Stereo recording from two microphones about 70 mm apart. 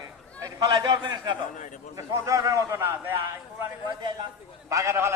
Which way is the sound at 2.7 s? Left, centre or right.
Right.